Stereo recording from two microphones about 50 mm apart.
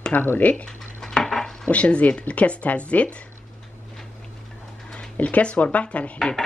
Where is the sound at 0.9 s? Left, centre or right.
Centre.